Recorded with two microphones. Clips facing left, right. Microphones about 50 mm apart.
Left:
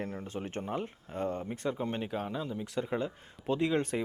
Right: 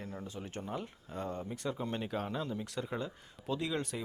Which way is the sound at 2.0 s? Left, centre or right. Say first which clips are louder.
Left 2 dB; centre.